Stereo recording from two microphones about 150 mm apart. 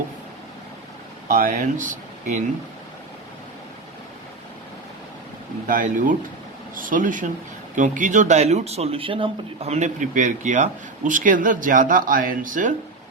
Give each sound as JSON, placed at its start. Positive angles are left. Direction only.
{"t": 1.3, "sound": "speech", "side_deg": -65}
{"t": 5.6, "sound": "speech", "side_deg": -60}